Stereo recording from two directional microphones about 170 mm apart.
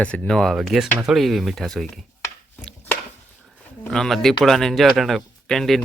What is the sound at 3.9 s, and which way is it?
Speech, 5° left (ahead or behind).